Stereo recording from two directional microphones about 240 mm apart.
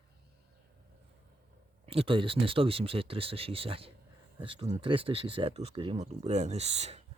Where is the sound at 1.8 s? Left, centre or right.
Right.